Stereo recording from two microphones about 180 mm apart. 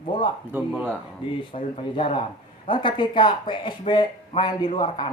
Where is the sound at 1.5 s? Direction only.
30° left (ahead or behind).